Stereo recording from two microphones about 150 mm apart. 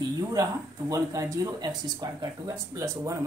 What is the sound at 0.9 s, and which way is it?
Speech, 20° right (ahead or behind).